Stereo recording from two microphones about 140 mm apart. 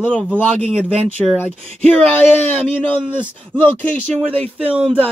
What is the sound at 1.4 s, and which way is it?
Speech, 10° left (ahead or behind).